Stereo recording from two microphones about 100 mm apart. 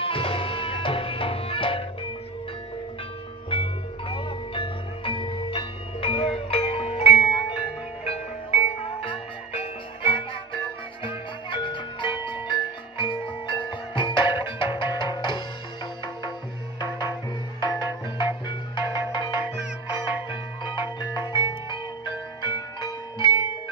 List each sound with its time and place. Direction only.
0.0 s music: 65° left (ahead or behind)
3.4 s music: 65° left (ahead or behind); by 7.2 s 85° left
8.5 s music: 80° left; by 16.3 s 45° left (ahead or behind)
17.6 s music: 50° left (ahead or behind)